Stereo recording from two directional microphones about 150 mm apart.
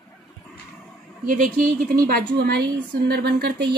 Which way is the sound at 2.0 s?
85° right.